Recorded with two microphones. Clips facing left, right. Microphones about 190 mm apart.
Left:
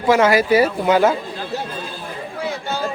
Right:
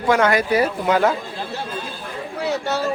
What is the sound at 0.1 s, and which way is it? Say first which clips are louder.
Speech: left 3 dB; 5° left (ahead or behind).